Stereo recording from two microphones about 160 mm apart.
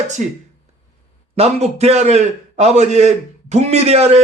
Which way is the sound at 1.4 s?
40° right (ahead or behind).